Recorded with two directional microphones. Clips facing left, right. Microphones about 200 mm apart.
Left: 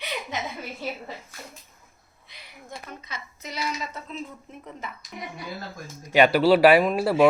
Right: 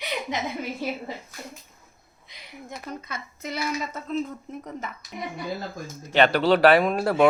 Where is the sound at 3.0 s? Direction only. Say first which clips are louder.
Right 4 dB; 55° right (ahead or behind).